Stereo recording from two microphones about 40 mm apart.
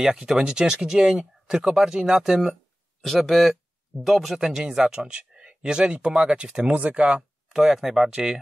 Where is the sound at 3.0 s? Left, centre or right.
Centre.